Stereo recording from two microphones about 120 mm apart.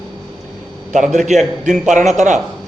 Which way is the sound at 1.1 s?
80° right.